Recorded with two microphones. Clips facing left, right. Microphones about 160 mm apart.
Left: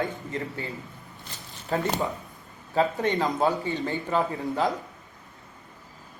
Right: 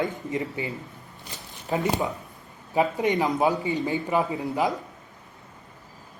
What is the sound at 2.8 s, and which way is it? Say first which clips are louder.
A man's voice: right 1 dB; 15° right (ahead or behind).